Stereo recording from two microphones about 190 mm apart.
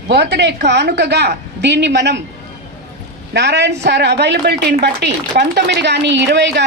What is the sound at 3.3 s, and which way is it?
A woman's voice, 65° right (ahead or behind).